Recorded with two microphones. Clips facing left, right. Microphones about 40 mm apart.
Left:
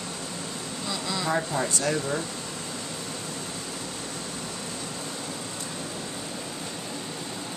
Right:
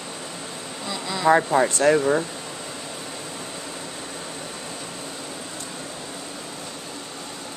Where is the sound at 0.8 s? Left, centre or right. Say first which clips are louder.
Right 2 dB; centre.